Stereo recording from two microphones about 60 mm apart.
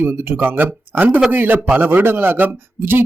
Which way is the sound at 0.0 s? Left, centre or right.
Right.